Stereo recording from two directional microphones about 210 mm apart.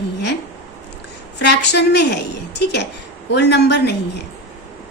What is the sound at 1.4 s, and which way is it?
A woman's voice, 55° left (ahead or behind).